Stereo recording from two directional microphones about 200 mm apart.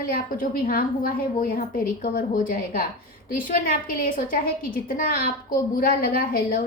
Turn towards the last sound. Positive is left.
turn(degrees=45)  # may be behind; listen again after turning